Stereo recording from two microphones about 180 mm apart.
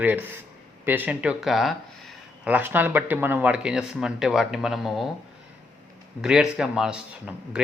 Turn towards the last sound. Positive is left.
turn(degrees=-5)  # may be behind; listen again after turning